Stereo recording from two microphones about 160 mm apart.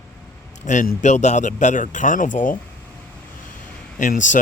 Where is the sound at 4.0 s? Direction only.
55° left (ahead or behind).